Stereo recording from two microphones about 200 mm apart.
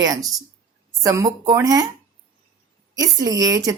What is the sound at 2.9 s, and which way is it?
Speech, 20° right (ahead or behind).